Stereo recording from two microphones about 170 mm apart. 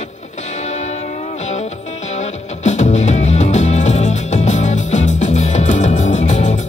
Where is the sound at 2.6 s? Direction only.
45° left (ahead or behind).